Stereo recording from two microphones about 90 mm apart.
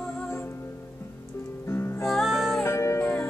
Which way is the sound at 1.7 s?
25° left (ahead or behind).